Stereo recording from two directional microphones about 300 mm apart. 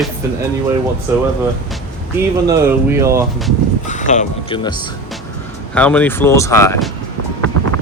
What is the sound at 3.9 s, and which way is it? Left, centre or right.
Speech, left.